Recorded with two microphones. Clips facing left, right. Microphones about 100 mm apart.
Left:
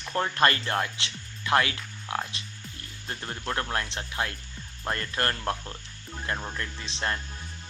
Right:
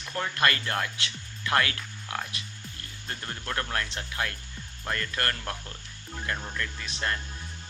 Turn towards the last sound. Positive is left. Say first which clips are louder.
# left 1 dB
turn(degrees=25)  # may be behind; listen again after turning